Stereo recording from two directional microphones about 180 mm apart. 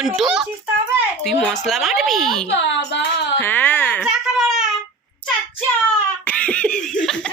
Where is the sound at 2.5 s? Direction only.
80° left.